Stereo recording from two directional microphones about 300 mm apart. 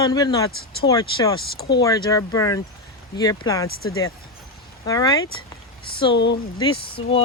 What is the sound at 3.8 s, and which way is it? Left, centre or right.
Speech, left.